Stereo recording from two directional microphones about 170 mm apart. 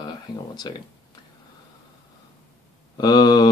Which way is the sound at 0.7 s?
30° left (ahead or behind).